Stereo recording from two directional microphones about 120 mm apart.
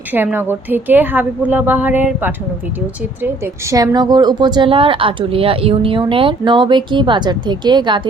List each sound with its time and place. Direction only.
0.1 s a woman's voice: 15° right (ahead or behind)
3.8 s speech: 35° right (ahead or behind)